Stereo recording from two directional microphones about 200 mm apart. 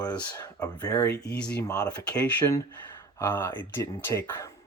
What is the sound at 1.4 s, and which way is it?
Speech, 5° left (ahead or behind).